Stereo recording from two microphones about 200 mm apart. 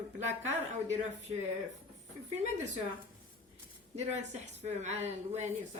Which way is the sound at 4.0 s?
35° right (ahead or behind).